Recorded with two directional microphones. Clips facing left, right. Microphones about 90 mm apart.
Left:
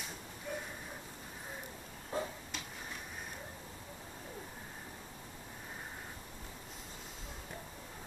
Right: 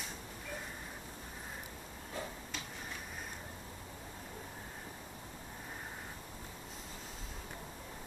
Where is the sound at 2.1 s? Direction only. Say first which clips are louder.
Left 5 dB; 35° left (ahead or behind).